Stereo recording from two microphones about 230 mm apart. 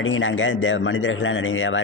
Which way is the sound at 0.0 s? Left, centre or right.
Left.